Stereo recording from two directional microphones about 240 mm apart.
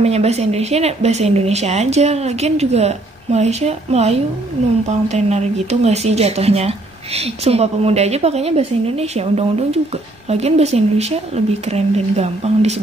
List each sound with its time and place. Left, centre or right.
0.0 s speech: right